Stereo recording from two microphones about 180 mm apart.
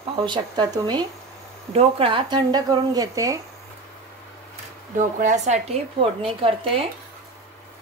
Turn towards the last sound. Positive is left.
turn(degrees=-30)  # may be behind; listen again after turning